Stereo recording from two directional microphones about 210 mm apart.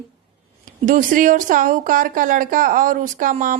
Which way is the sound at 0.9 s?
40° right (ahead or behind).